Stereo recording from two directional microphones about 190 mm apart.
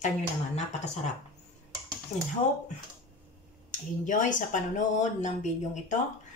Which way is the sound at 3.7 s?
40° left (ahead or behind).